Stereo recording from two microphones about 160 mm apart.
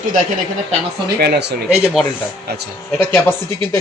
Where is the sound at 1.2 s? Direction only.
90° right.